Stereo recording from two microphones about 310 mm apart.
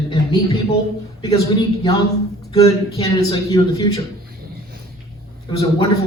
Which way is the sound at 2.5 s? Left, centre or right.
Centre.